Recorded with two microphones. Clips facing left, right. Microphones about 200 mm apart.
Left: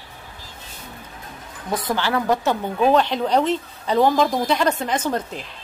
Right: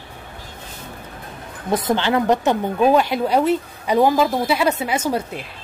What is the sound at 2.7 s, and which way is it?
Speech, 10° right (ahead or behind).